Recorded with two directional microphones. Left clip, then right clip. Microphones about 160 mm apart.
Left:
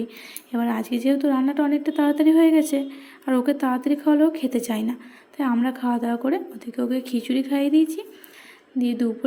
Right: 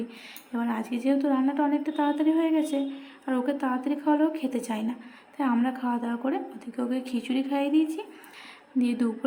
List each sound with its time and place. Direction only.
0.5 s a woman's voice: 25° left (ahead or behind); by 9.1 s 5° left (ahead or behind)